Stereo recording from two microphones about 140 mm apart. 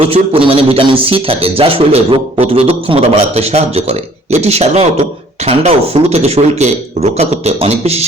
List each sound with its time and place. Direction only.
0.0 s a man's voice: 40° right (ahead or behind)